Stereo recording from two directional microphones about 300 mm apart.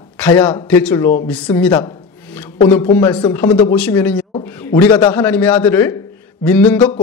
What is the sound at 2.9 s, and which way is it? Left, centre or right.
A man's voice, centre.